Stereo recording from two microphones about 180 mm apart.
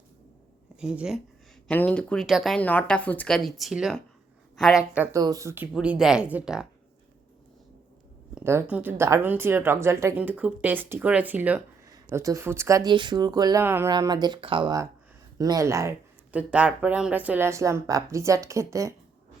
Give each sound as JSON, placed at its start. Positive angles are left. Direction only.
{"t": 0.8, "sound": "a woman's voice", "side_deg": -5}
{"t": 1.6, "sound": "a woman's voice", "side_deg": 5}
{"t": 5.1, "sound": "speech", "side_deg": -20}
{"t": 5.7, "sound": "a woman's voice", "side_deg": -5}
{"t": 8.4, "sound": "speech", "side_deg": -10}